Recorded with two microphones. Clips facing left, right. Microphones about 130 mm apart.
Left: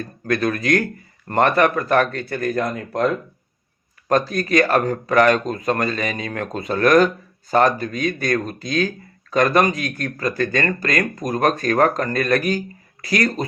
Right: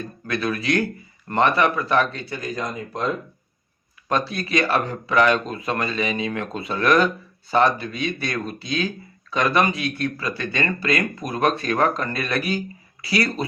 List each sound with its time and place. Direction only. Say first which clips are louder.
0.0 s speech: left 5 dB; 45° left (ahead or behind); by 3.1 s 60° left (ahead or behind)
4.1 s speech: left 5 dB; 45° left (ahead or behind)